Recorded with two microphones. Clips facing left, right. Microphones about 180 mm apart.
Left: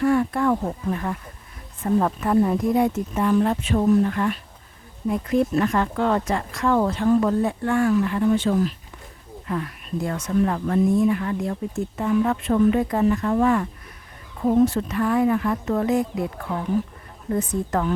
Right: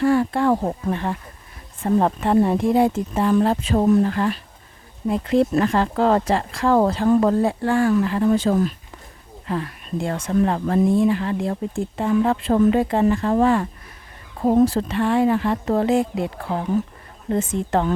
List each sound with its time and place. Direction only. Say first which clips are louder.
0.0 s a woman's voice: right 2 dB; 30° right (ahead or behind)
5.4 s a woman's voice: right 3 dB; 30° right (ahead or behind)